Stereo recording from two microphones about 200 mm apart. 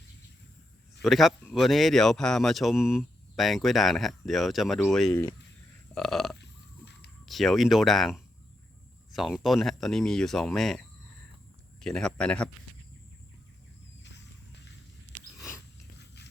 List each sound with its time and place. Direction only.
1.0 s speech: centre (ahead or behind)
5.9 s burping: centre (ahead or behind)
6.4 s burping: 60° left (ahead or behind)
7.3 s speech: centre (ahead or behind)
16.0 s a sound: 55° left (ahead or behind)